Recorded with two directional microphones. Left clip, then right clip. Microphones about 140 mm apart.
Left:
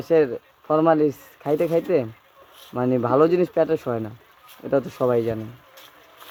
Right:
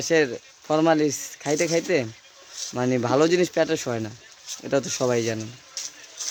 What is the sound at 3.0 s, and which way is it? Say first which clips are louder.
Speech: left 2 dB; 5° left (ahead or behind).